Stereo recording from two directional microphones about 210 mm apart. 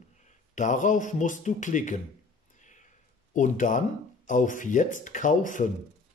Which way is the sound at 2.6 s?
35° left (ahead or behind).